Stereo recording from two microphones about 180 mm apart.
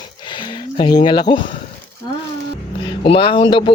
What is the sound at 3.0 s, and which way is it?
Speech, 30° left (ahead or behind).